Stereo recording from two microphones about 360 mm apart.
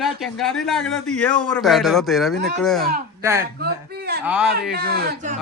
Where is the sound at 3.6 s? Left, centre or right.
Right.